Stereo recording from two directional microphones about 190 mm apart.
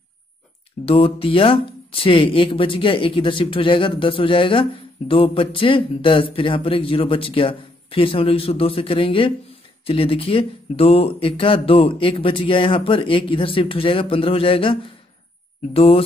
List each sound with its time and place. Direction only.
0.8 s speech: 30° left (ahead or behind)